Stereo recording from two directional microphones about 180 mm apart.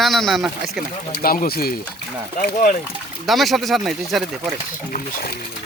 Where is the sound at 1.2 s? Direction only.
55° left (ahead or behind).